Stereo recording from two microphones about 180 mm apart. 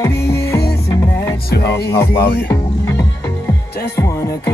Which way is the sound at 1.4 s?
60° left (ahead or behind).